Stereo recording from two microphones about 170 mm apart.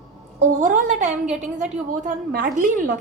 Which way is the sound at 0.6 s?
45° right (ahead or behind).